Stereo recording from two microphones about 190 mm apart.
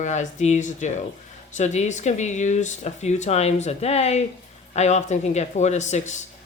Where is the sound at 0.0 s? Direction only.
40° left (ahead or behind).